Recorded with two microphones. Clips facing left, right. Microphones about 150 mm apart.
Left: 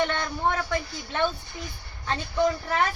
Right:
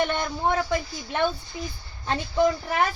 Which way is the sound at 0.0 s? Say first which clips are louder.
Right 1 dB; 15° right (ahead or behind).